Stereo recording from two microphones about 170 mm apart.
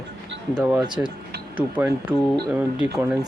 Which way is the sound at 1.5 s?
10° right (ahead or behind).